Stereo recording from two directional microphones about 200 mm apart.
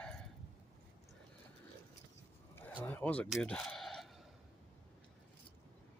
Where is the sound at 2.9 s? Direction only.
10° left (ahead or behind).